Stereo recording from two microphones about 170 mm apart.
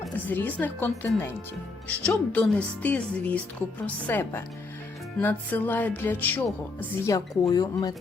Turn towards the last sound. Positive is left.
turn(degrees=20)  # may be behind; listen again after turning